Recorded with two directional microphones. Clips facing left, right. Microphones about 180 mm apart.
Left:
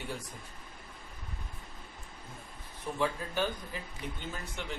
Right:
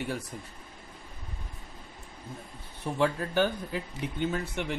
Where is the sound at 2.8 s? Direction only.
70° right (ahead or behind).